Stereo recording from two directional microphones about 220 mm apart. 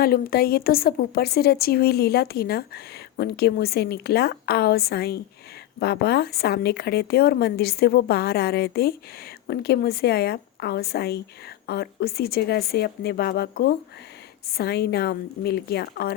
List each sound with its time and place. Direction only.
0.0 s a woman's voice: 45° left (ahead or behind)